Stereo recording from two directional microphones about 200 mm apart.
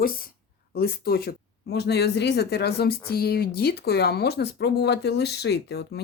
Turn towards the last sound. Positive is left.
turn(degrees=55)  # may be behind; listen again after turning